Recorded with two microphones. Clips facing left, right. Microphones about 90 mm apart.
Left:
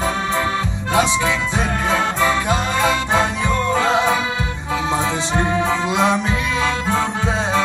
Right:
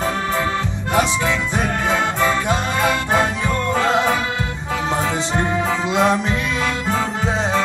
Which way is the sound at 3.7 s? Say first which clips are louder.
Even; 15° left (ahead or behind).